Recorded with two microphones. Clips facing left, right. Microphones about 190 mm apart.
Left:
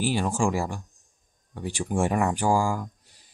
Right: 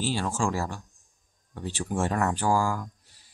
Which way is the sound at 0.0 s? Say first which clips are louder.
Left 3 dB; 15° left (ahead or behind).